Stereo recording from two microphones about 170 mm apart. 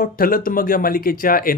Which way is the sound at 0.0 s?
55° left (ahead or behind).